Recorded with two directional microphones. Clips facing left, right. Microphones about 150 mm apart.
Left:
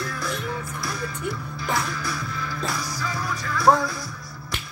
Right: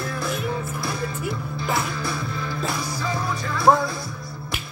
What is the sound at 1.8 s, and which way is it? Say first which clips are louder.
Music: right 2 dB; 25° right (ahead or behind).